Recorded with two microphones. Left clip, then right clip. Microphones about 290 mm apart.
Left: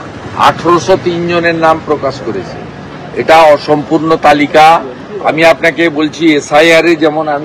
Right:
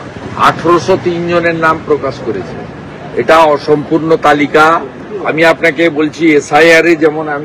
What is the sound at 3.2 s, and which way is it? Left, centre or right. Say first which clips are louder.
Speech: left 2 dB; centre.